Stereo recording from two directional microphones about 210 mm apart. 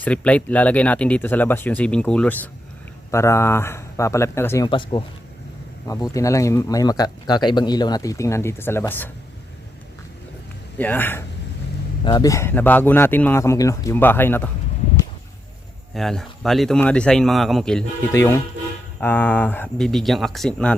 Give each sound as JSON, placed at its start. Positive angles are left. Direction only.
{"t": 0.0, "sound": "speech", "side_deg": 5}
{"t": 10.8, "sound": "speech", "side_deg": 10}
{"t": 16.0, "sound": "speech", "side_deg": 0}
{"t": 18.1, "sound": "speech", "side_deg": 15}